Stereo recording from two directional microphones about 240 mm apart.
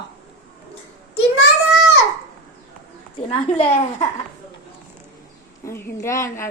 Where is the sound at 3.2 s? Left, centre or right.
Left.